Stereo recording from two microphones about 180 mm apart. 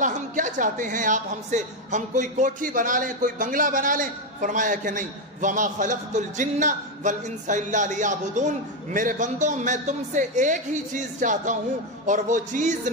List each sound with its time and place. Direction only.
0.0 s a woman's voice: 45° right (ahead or behind)